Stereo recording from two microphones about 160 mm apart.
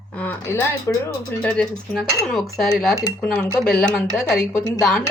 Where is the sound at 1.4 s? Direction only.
5° left (ahead or behind).